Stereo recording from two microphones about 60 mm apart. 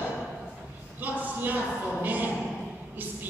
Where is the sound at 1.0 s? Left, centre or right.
Right.